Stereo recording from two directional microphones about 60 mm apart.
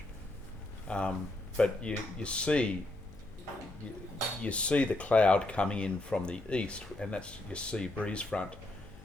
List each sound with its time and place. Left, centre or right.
0.9 s speech: centre
4.4 s speech: centre